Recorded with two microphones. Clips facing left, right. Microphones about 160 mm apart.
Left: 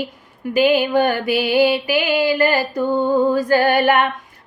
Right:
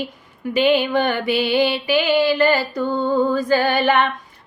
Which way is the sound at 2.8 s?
15° left (ahead or behind).